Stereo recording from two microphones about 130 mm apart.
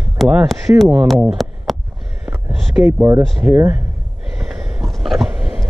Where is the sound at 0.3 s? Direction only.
5° right (ahead or behind).